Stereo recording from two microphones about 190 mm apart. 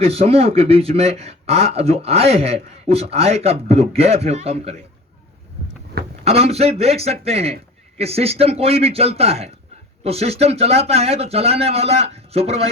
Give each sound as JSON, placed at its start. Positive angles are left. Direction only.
{"t": 0.0, "sound": "speech", "side_deg": -30}
{"t": 6.2, "sound": "speech", "side_deg": -35}